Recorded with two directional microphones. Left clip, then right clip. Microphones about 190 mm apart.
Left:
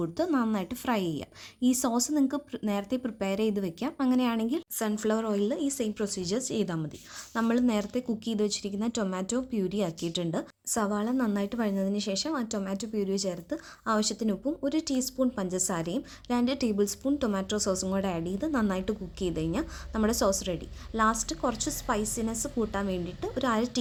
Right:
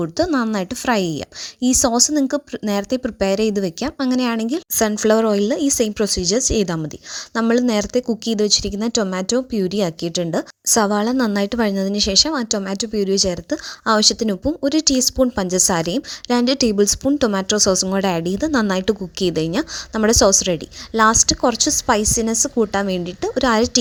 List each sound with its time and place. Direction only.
0.0 s a woman's voice: 35° right (ahead or behind)